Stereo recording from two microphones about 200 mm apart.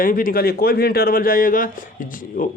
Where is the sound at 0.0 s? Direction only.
45° left (ahead or behind).